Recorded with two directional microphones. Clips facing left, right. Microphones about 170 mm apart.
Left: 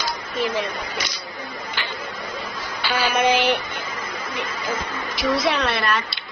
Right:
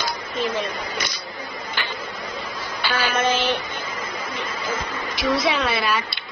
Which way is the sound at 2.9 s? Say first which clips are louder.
Left 3 dB; 15° left (ahead or behind).